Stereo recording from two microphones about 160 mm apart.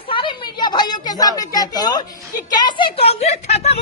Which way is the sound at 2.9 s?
40° left (ahead or behind).